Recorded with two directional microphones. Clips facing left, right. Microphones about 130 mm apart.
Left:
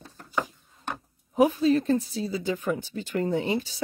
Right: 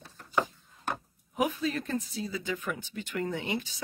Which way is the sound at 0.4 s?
5° right (ahead or behind).